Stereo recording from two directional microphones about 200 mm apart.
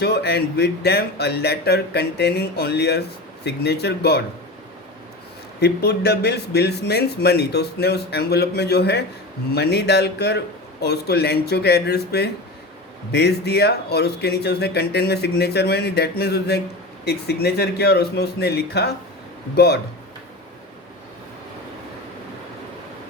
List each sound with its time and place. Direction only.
0.0 s a man's voice: 55° left (ahead or behind)
5.5 s a man's voice: 55° left (ahead or behind)